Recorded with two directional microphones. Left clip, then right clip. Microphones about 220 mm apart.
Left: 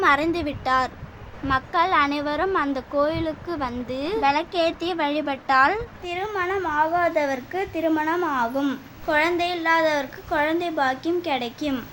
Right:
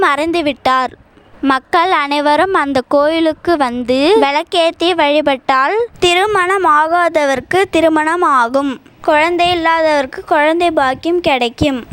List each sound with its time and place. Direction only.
0.0 s a woman's voice: 45° right (ahead or behind)